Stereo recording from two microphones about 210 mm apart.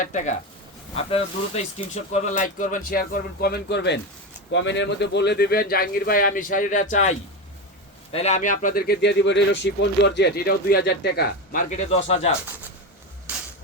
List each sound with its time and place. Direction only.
0.0 s speech: 35° left (ahead or behind)
8.1 s speech: 30° left (ahead or behind)